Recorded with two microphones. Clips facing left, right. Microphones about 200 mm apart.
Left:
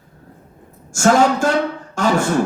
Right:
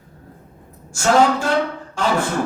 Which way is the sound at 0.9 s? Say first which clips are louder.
Left 2 dB; 45° left (ahead or behind).